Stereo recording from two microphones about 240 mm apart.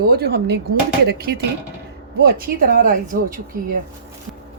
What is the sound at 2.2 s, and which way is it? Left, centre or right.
Speech, right.